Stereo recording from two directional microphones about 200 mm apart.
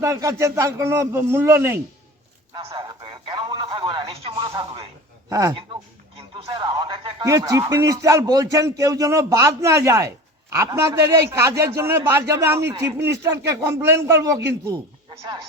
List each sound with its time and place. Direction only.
0.0 s speech: 15° right (ahead or behind)
2.6 s radio: 30° right (ahead or behind)
4.5 s a sound: 25° right (ahead or behind)
5.3 s speech: 15° right (ahead or behind)